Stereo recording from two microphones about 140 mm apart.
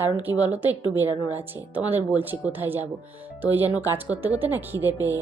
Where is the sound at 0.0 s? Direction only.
15° right (ahead or behind).